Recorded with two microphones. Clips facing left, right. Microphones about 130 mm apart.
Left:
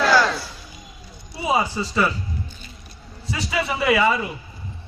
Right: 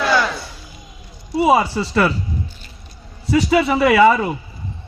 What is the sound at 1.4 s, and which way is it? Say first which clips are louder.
Speech: right 7 dB; 65° right (ahead or behind).